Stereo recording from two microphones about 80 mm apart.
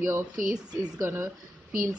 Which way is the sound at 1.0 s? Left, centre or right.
Right.